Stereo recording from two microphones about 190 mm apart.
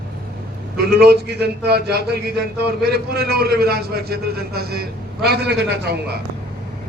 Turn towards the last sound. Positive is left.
turn(degrees=-60)  # may be behind; listen again after turning